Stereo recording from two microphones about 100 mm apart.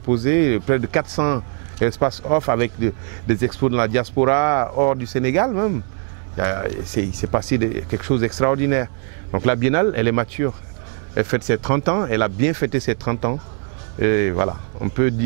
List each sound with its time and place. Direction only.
0.1 s speech: 15° right (ahead or behind)